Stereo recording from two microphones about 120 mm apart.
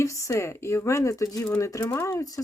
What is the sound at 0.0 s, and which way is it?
Speech, 25° left (ahead or behind).